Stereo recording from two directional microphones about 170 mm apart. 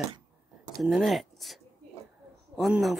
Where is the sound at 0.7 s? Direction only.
Centre (ahead or behind).